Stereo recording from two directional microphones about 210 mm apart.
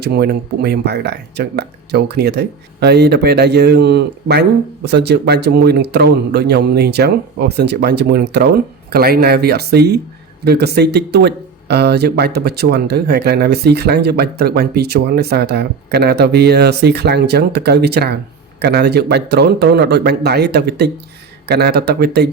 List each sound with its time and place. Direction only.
0.0 s speech: 50° right (ahead or behind)